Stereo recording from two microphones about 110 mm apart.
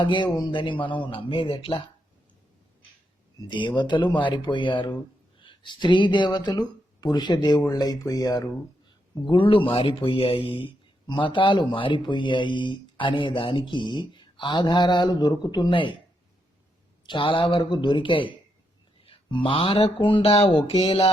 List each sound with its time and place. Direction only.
0.0 s a man's voice: 45° left (ahead or behind)
3.4 s a man's voice: 45° left (ahead or behind)
11.0 s a man's voice: 45° left (ahead or behind)
17.1 s a man's voice: 50° left (ahead or behind)
20.3 s a sound: 55° left (ahead or behind)